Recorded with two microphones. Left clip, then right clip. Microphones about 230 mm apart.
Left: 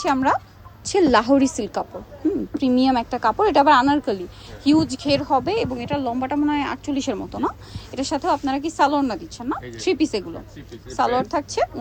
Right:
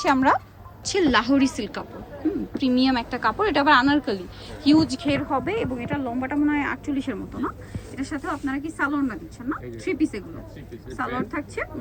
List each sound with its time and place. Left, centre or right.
0.0 s a woman's voice: centre
0.9 s a woman's voice: left